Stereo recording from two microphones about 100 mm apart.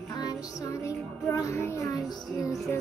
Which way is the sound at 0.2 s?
35° left (ahead or behind).